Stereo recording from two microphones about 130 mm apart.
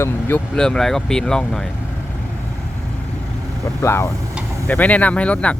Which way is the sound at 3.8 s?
20° left (ahead or behind).